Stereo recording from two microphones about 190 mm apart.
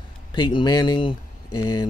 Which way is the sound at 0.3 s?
25° left (ahead or behind).